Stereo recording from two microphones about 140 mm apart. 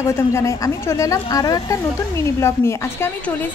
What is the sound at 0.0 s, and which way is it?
A woman's voice, 20° left (ahead or behind).